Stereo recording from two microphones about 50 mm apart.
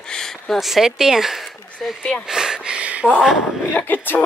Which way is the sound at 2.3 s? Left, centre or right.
Centre.